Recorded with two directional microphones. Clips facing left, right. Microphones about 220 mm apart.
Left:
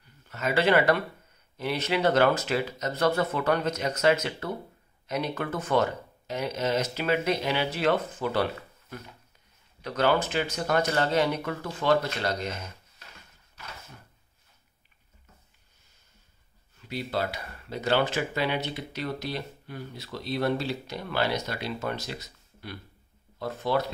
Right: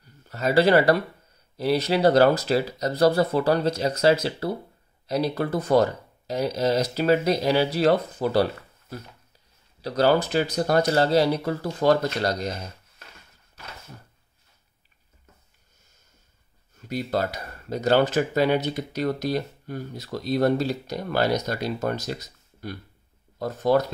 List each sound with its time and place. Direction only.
0.0 s speech: 35° right (ahead or behind)
9.8 s speech: 35° right (ahead or behind)
16.7 s speech: 45° right (ahead or behind)